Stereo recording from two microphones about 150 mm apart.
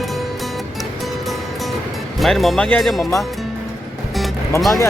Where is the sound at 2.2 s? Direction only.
Centre (ahead or behind).